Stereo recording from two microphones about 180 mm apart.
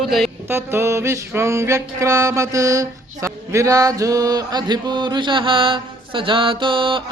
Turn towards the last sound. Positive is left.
turn(degrees=-30)  # may be behind; listen again after turning